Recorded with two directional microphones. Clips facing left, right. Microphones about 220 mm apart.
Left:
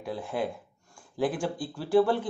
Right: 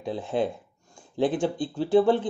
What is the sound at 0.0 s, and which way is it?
Speech, 25° right (ahead or behind).